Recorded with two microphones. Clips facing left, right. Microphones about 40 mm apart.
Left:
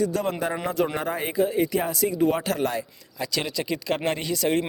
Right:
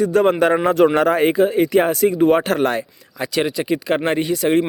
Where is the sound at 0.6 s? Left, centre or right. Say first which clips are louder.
Right 10 dB; right.